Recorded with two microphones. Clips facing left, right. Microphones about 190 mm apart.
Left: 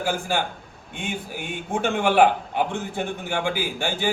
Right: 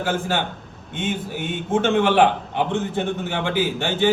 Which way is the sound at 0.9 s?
Centre (ahead or behind).